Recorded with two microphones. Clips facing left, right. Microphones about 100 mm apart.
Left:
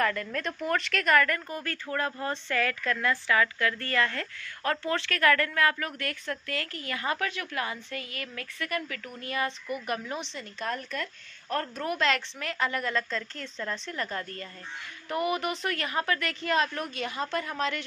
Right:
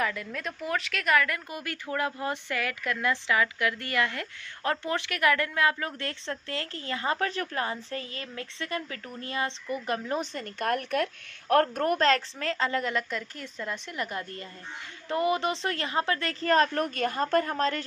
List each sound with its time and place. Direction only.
0.0 s speech: 10° right (ahead or behind); by 17.8 s 40° right (ahead or behind)